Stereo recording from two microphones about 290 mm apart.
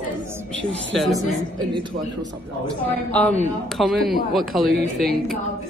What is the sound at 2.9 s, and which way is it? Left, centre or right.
Speech, centre.